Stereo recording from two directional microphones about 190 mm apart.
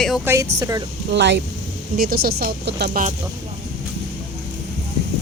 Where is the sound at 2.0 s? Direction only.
50° right (ahead or behind).